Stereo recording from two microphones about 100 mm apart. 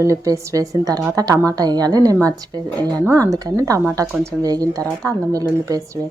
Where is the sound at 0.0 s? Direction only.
30° right (ahead or behind).